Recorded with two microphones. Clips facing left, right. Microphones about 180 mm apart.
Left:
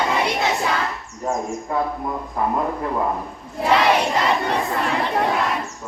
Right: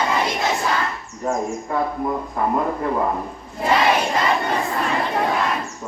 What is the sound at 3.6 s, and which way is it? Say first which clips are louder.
Crowd: left 1 dB; centre (ahead or behind).